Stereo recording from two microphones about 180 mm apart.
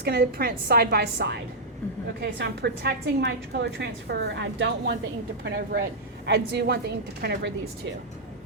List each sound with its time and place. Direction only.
0.0 s a woman's voice: 60° right (ahead or behind)